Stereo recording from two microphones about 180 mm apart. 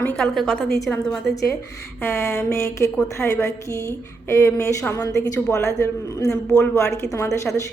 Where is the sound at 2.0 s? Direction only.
15° left (ahead or behind).